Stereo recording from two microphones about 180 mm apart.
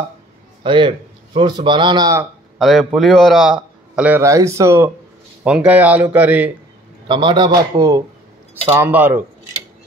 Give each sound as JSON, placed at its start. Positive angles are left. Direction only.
{"t": 0.7, "sound": "a man's voice", "side_deg": -30}
{"t": 2.6, "sound": "a man's voice", "side_deg": 0}
{"t": 7.1, "sound": "a man's voice", "side_deg": -25}